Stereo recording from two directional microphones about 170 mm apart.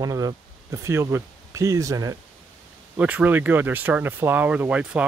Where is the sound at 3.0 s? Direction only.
10° right (ahead or behind).